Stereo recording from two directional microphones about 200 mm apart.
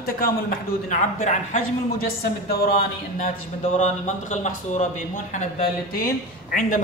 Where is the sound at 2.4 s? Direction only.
50° left (ahead or behind).